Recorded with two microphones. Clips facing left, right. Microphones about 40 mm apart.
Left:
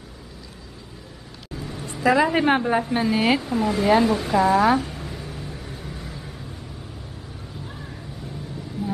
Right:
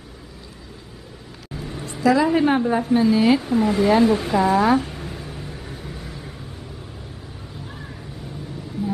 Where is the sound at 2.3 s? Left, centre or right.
Left.